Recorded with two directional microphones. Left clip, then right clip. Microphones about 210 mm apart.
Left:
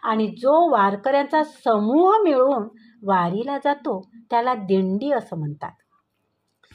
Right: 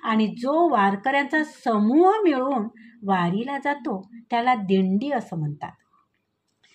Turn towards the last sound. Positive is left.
turn(degrees=20)  # may be behind; listen again after turning